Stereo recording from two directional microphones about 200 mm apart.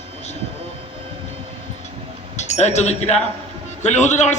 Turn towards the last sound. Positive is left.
turn(degrees=35)  # may be behind; listen again after turning